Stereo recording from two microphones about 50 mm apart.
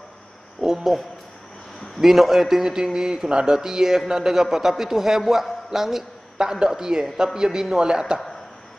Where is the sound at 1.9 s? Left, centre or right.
Centre.